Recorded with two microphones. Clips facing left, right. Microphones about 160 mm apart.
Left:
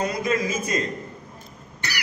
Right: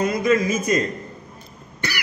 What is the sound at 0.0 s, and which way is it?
Speech, 30° left (ahead or behind).